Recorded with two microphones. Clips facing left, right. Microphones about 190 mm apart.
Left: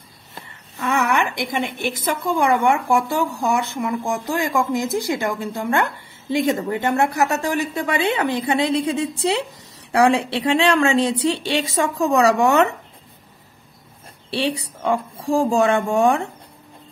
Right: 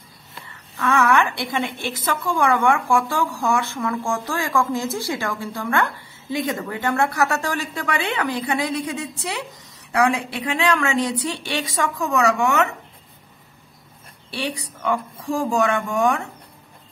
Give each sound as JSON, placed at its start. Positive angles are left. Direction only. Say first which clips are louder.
{"t": 0.7, "sound": "a woman's voice", "louder": "right 2 dB", "side_deg": 20}
{"t": 14.3, "sound": "a woman's voice", "louder": "left 5 dB", "side_deg": 30}